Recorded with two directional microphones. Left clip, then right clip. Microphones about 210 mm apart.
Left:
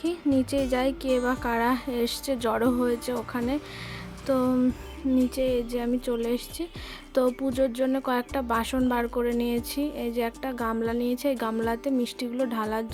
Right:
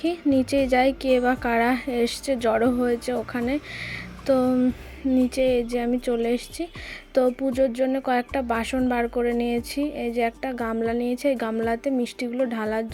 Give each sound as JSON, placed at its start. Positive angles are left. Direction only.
{"t": 0.0, "sound": "speech", "side_deg": -10}